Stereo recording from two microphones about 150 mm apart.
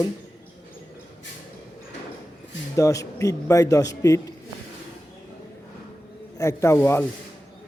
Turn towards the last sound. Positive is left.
turn(degrees=15)  # may be behind; listen again after turning